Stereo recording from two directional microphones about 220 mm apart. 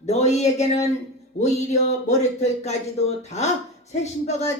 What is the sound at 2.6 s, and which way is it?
Speech, 30° left (ahead or behind).